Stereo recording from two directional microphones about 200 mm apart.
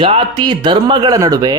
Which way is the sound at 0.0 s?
25° right (ahead or behind).